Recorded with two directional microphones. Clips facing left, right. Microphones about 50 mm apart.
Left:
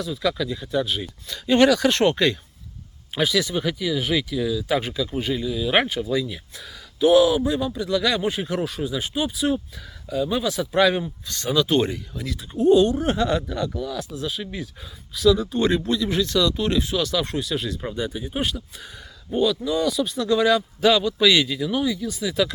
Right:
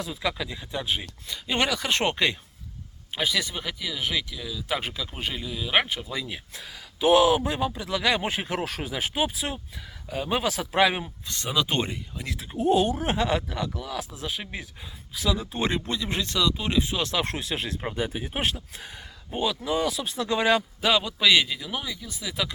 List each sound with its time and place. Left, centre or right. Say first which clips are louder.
0.0 s speech: left 5 dB; right; by 3.5 s centre
3.5 s speech: left 9 dB; centre
5.0 s speech: left 7 dB; centre
6.2 s speech: left 3 dB; right
7.7 s speech: left 3 dB; right
8.3 s speech: left 4 dB; right
9.4 s speech: left 10 dB; centre
10.1 s speech: left 3 dB; right
10.8 s speech: left 3 dB; right
14.2 s speech: left 4 dB; right; by 17.0 s centre
17.0 s speech: left 4 dB; right
19.4 s speech: left 4 dB; right
20.8 s speech: left 6 dB; right
21.6 s speech: left 10 dB; centre